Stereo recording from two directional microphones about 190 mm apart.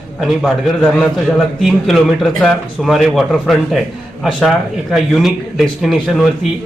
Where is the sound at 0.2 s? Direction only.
Centre (ahead or behind).